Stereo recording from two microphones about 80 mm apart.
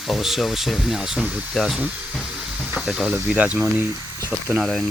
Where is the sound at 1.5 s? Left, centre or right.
Centre.